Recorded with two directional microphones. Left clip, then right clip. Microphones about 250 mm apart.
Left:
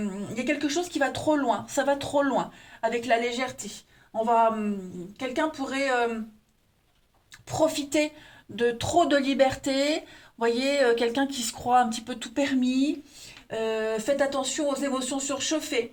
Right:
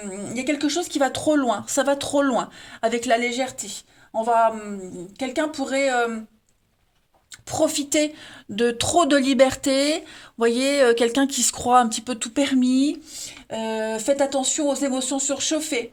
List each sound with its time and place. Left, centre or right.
0.4 s speech: right
7.4 s speech: right